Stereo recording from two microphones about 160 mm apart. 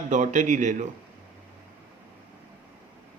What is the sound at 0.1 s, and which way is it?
Speech, 50° right (ahead or behind).